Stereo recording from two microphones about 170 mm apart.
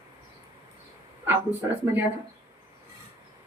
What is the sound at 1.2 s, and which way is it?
Speech, 15° right (ahead or behind).